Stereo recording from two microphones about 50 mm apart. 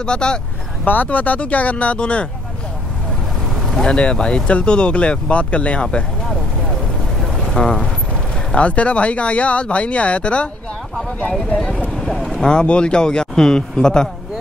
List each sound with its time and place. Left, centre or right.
0.0 s speech: centre
0.8 s speech: left
3.8 s speech: centre
7.5 s speech: centre
8.5 s speech: left
12.0 s speech: centre